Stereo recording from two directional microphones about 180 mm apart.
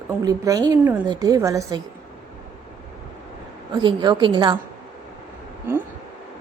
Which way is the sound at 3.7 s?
25° right (ahead or behind).